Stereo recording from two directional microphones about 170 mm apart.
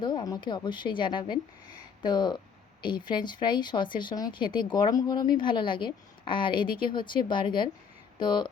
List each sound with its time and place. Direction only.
0.0 s speech: 25° left (ahead or behind)